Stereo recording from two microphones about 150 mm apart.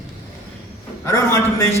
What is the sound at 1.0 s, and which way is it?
Speech, 20° left (ahead or behind).